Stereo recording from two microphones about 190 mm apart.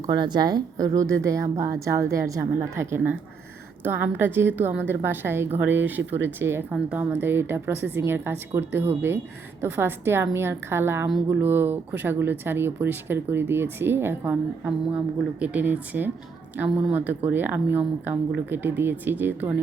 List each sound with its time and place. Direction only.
0.0 s speech: 20° right (ahead or behind)